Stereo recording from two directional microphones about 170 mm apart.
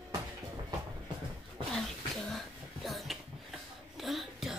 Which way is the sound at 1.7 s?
Centre (ahead or behind).